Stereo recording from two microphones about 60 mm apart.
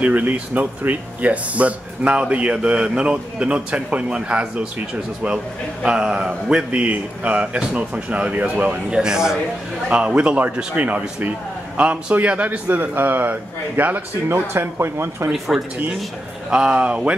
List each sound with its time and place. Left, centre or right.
0.0 s speech: right
8.9 s speech: centre; by 14.4 s right
14.5 s speech: right
15.3 s speech: centre
16.4 s speech: centre